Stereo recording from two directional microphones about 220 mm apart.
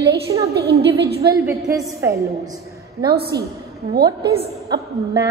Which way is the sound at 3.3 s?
15° right (ahead or behind).